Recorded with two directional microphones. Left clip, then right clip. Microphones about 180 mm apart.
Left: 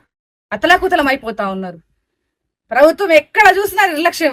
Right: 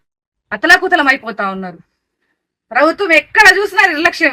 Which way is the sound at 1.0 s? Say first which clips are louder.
Right 3 dB; 10° left (ahead or behind).